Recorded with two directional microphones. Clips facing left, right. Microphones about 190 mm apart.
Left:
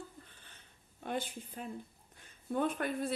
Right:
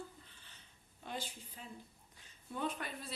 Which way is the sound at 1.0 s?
55° left (ahead or behind).